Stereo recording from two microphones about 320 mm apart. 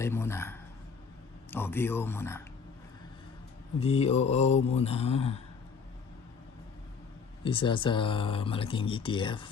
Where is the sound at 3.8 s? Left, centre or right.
Centre.